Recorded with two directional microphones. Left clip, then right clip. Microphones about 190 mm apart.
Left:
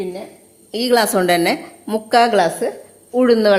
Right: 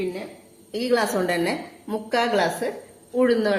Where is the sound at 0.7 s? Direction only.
55° left (ahead or behind).